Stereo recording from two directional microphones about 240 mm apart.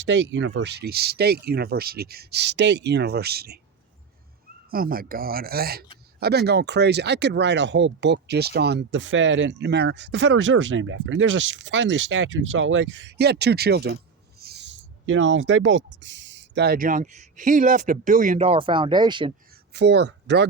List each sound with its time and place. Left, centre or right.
0.1 s speech: right
4.7 s speech: right; by 19.3 s centre
19.7 s speech: right